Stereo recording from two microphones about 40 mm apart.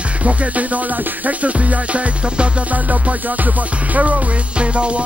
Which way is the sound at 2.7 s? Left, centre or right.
Right.